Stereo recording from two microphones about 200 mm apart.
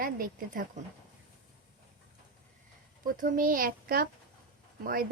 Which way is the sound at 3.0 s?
45° right (ahead or behind).